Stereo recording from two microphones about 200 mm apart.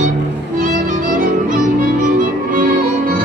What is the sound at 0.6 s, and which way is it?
Music, 40° right (ahead or behind).